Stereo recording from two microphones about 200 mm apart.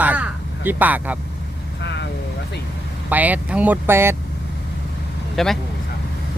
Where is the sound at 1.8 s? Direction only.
60° left (ahead or behind).